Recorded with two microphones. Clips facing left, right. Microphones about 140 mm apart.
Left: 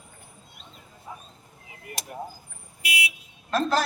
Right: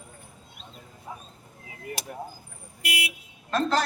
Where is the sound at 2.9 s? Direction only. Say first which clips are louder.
Left 1 dB; 50° right (ahead or behind).